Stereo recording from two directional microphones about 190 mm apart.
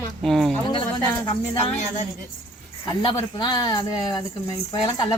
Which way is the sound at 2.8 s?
25° left (ahead or behind).